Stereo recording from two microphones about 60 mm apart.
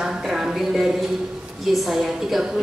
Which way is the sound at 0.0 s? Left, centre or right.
Centre.